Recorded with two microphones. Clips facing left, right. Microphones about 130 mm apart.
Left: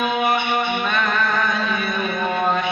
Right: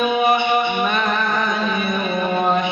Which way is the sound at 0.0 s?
15° right (ahead or behind).